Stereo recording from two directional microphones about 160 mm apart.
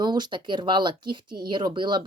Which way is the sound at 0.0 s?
25° right (ahead or behind).